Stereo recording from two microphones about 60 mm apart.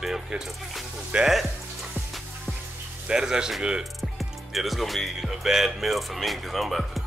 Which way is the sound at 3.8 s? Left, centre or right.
Centre.